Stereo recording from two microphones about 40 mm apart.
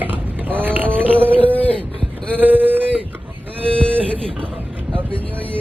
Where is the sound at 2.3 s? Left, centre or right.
Right.